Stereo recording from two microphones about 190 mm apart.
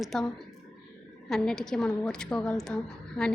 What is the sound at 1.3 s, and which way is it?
A woman's voice, 5° left (ahead or behind).